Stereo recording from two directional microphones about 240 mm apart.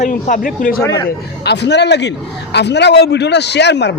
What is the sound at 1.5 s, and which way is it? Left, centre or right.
A man's voice, left.